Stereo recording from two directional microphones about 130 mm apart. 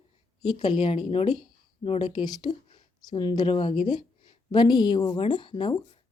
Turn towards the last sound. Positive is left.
turn(degrees=40)  # may be behind; listen again after turning